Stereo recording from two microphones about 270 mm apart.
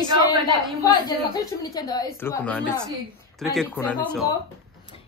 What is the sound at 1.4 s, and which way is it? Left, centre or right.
A woman's voice, centre.